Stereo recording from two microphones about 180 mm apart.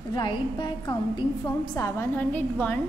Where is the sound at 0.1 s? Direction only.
25° left (ahead or behind).